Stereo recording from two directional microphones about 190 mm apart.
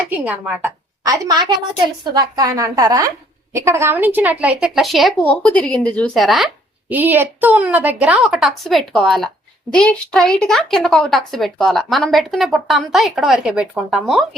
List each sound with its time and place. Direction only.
0.1 s a woman's voice: 5° right (ahead or behind)
1.0 s a woman's voice: 20° right (ahead or behind); by 14.3 s centre (ahead or behind)